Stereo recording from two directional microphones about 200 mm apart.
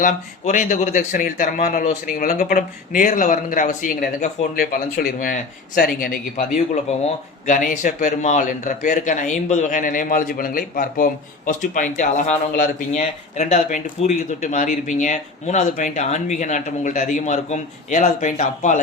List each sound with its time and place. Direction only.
0.0 s speech: 40° left (ahead or behind)
7.4 s speech: 40° left (ahead or behind)